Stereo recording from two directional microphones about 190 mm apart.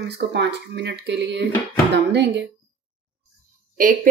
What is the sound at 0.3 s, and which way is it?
Speech, 65° right (ahead or behind).